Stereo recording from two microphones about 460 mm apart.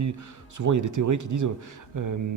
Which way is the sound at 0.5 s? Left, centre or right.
Right.